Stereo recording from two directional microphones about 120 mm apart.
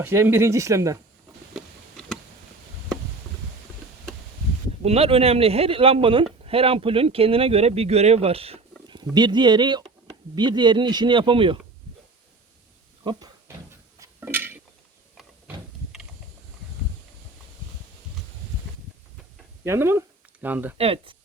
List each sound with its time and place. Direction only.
0.0 s speech: 20° right (ahead or behind)
1.5 s a sound: centre (ahead or behind)
4.8 s speech: 60° right (ahead or behind)
8.9 s speech: 40° right (ahead or behind)
13.1 s speech: 35° right (ahead or behind)
14.2 s a sound: 15° right (ahead or behind)
19.6 s speech: 20° right (ahead or behind)
20.7 s speech: 55° right (ahead or behind)